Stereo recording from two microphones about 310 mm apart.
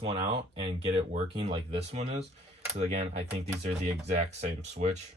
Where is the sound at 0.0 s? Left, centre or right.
Centre.